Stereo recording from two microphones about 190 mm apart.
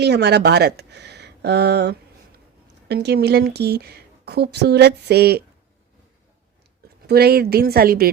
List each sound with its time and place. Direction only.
0.0 s a woman's voice: 60° right (ahead or behind)
7.1 s a woman's voice: 55° right (ahead or behind)